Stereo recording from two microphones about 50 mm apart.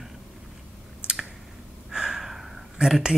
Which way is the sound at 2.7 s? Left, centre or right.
Centre.